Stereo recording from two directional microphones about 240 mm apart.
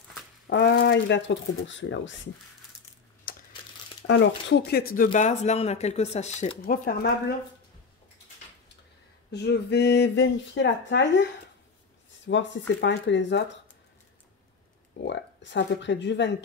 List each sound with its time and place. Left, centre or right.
0.5 s speech: left
3.3 s computer keyboard: left
4.5 s speech: left
9.3 s speech: left
12.3 s speech: left
15.0 s speech: left